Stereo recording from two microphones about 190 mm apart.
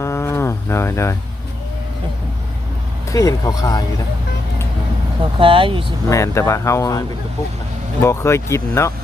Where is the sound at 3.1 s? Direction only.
15° left (ahead or behind).